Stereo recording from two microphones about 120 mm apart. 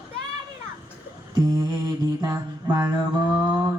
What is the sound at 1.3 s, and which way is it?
Mantra, 35° right (ahead or behind).